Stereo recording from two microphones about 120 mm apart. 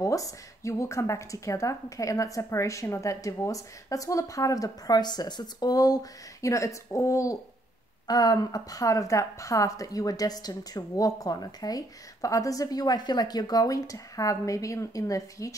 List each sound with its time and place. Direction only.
0.0 s a woman's voice: 30° left (ahead or behind)